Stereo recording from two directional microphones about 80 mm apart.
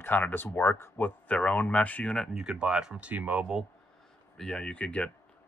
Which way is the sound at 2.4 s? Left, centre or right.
Centre.